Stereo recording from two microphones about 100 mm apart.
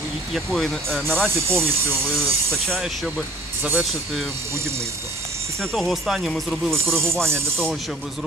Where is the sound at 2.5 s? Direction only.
Centre (ahead or behind).